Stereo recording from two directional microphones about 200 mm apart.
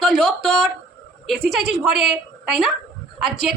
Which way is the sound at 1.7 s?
5° right (ahead or behind).